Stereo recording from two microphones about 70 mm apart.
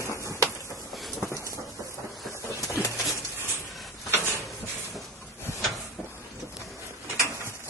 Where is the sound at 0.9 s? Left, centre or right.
Centre.